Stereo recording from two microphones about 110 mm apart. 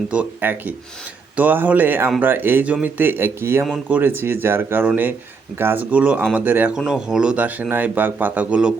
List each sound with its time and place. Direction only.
0.1 s a man's voice: 15° right (ahead or behind)
6.7 s a man's voice: 5° right (ahead or behind)